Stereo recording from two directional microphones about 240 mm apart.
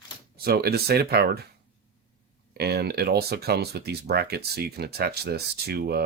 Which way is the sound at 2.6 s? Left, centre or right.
Right.